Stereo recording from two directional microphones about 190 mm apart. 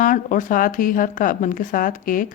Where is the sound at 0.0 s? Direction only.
45° left (ahead or behind).